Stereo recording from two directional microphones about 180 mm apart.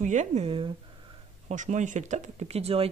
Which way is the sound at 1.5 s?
40° right (ahead or behind).